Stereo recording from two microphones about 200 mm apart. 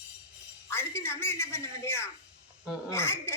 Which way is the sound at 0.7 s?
10° left (ahead or behind).